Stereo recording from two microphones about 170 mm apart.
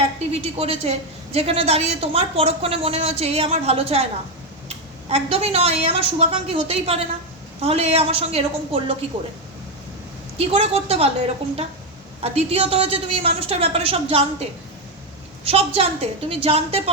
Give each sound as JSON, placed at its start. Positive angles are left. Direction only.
{"t": 0.3, "sound": "a woman's voice", "side_deg": -35}
{"t": 10.3, "sound": "a woman's voice", "side_deg": -35}
{"t": 15.4, "sound": "a woman's voice", "side_deg": -35}